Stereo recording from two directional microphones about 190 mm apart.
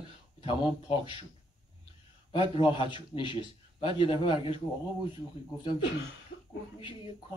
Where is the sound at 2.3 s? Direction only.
25° left (ahead or behind).